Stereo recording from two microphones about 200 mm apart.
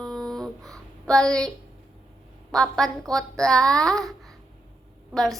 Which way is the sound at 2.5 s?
Centre (ahead or behind).